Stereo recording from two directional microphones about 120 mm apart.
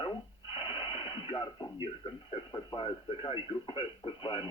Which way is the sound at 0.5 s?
40° left (ahead or behind).